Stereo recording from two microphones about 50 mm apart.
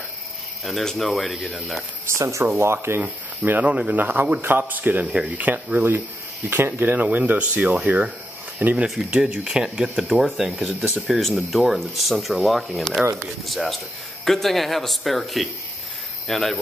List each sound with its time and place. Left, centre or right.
0.7 s speech: centre
2.0 s speech: right
2.6 s speech: right
3.4 s speech: right
8.6 s speech: right
9.0 s speech: centre
9.4 s speech: centre
10.1 s speech: centre
13.0 s speech: right
13.5 s speech: centre